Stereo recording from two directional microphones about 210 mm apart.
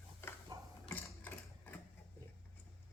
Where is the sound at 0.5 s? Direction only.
15° right (ahead or behind).